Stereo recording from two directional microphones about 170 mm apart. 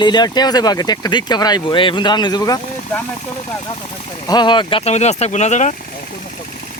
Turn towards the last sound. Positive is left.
turn(degrees=45)  # may be behind; listen again after turning